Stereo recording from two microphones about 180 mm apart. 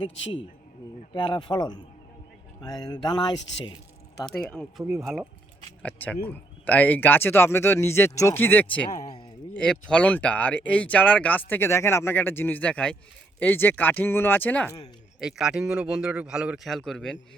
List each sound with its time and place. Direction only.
1.1 s speech: 25° left (ahead or behind)
4.3 s a man's voice: 5° left (ahead or behind)
5.8 s a sound: 10° left (ahead or behind)
6.2 s speech: 10° left (ahead or behind)
15.2 s a man's voice: 5° right (ahead or behind)